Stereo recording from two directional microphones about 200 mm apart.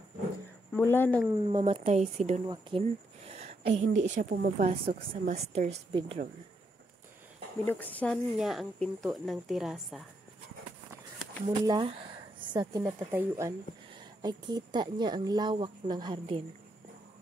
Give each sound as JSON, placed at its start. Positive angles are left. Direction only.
{"t": 0.7, "sound": "speech", "side_deg": 10}
{"t": 1.4, "sound": "a woman's voice", "side_deg": -25}
{"t": 2.4, "sound": "a woman's voice", "side_deg": -25}
{"t": 7.6, "sound": "speech", "side_deg": 10}
{"t": 11.4, "sound": "speech", "side_deg": -25}